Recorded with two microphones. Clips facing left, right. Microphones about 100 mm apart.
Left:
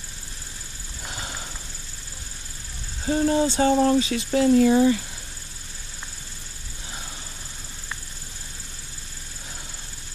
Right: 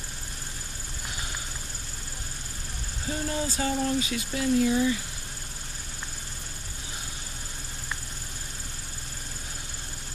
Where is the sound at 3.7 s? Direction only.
50° left (ahead or behind).